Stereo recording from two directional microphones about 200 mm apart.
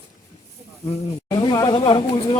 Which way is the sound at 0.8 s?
30° left (ahead or behind).